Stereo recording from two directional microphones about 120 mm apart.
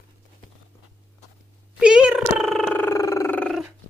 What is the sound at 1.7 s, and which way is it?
Cat, 10° right (ahead or behind).